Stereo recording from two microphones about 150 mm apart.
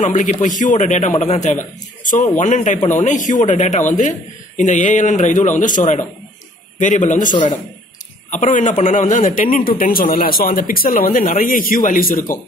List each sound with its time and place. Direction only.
0.0 s a man's voice: 50° left (ahead or behind); by 12.4 s 70° left (ahead or behind)